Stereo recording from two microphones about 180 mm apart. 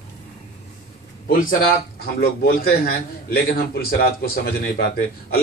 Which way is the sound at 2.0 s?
55° left (ahead or behind).